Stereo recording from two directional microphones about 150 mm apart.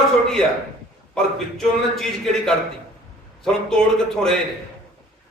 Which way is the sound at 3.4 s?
5° left (ahead or behind).